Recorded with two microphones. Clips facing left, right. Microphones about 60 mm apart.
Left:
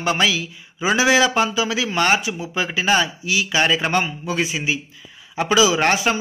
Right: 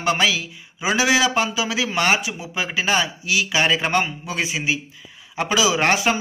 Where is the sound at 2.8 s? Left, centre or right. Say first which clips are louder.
Left 4 dB; left.